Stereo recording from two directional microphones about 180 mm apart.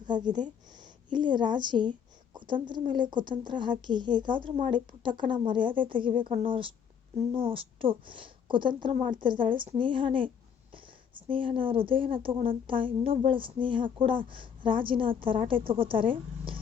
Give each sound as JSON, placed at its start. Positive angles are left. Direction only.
{"t": 0.0, "sound": "a woman's voice", "side_deg": -25}